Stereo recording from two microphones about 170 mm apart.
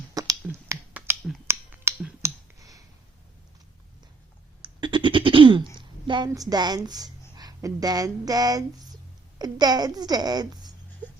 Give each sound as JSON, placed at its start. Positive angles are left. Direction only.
{"t": 0.1, "sound": "finger snapping", "side_deg": -20}
{"t": 2.2, "sound": "clicking", "side_deg": -20}
{"t": 4.6, "sound": "a sound", "side_deg": -25}
{"t": 6.1, "sound": "a woman's voice", "side_deg": -25}